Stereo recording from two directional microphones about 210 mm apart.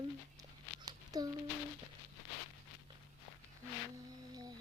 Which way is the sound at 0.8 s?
15° right (ahead or behind).